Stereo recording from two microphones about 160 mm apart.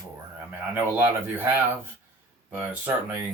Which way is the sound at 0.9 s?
15° right (ahead or behind).